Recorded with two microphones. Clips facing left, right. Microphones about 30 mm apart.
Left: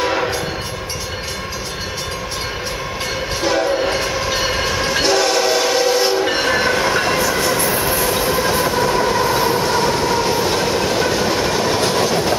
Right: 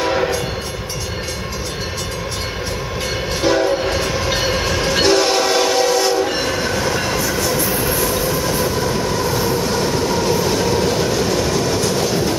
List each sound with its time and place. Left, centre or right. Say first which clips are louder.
0.0 s train: even; centre
3.4 s train: right 1 dB; centre
5.9 s train: even; left